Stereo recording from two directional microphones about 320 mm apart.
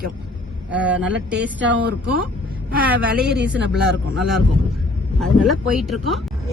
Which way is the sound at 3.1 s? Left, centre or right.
Right.